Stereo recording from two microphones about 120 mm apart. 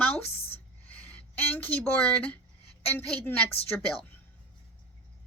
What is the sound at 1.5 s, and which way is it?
Speech, 15° left (ahead or behind).